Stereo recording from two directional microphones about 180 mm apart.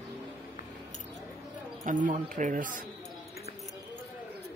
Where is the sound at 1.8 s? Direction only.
45° right (ahead or behind).